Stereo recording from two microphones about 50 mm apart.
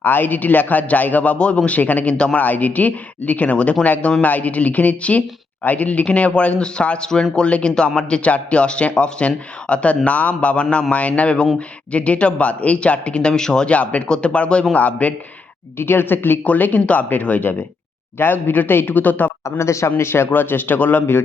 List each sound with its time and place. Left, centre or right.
0.0 s a woman's voice: left
2.4 s a woman's voice: left
15.8 s speech: left
16.4 s a woman's voice: left
19.5 s speech: left
20.0 s speech: left